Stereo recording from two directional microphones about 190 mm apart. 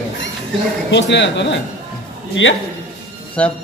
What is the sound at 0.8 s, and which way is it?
Speech, 70° left (ahead or behind).